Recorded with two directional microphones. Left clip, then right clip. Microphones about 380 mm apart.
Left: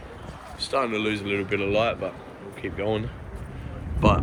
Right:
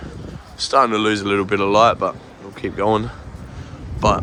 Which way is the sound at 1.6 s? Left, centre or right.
Centre.